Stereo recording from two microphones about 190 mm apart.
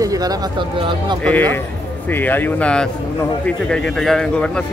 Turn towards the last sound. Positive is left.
turn(degrees=5)  # may be behind; listen again after turning